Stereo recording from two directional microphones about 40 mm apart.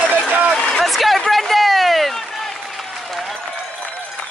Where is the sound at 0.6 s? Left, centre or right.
Left.